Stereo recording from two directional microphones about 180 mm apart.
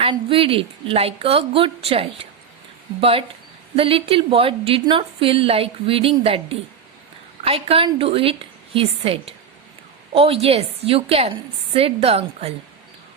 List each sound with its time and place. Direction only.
0.0 s a woman's voice: 30° right (ahead or behind)